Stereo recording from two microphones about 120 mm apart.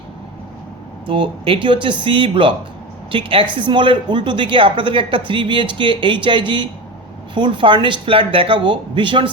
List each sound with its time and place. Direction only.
1.0 s speech: 45° right (ahead or behind)